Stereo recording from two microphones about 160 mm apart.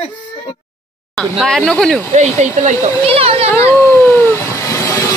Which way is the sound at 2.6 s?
40° right (ahead or behind).